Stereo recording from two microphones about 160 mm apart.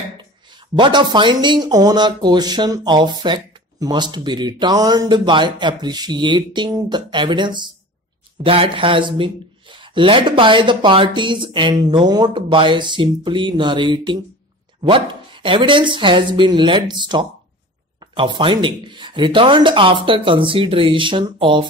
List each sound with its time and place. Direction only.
0.7 s speech: 30° right (ahead or behind)